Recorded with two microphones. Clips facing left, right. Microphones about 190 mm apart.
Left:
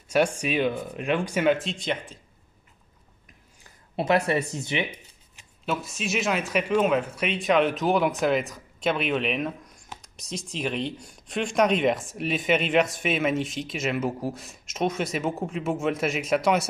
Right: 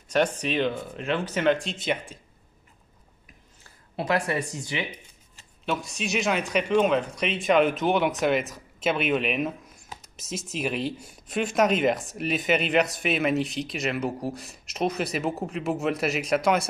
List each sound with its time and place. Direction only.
0.1 s speech: 10° left (ahead or behind)
3.9 s speech: 25° left (ahead or behind)
5.7 s speech: centre (ahead or behind)